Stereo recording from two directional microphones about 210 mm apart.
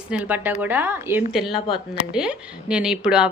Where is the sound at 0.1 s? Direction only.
5° right (ahead or behind).